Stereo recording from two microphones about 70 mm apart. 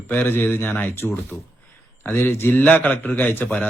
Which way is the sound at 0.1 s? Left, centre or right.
Left.